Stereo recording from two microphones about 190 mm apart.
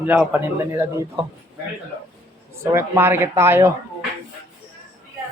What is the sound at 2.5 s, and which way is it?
A man's voice, 15° right (ahead or behind).